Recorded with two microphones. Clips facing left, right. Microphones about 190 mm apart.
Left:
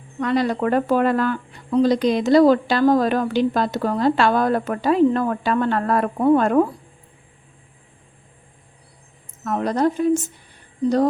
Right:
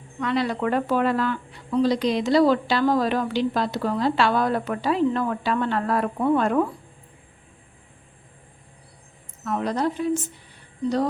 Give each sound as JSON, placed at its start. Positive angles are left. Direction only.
{"t": 0.2, "sound": "a woman's voice", "side_deg": 45}
{"t": 9.4, "sound": "a woman's voice", "side_deg": 45}